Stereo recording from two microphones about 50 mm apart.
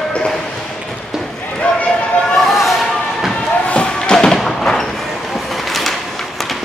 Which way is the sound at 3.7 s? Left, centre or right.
Centre.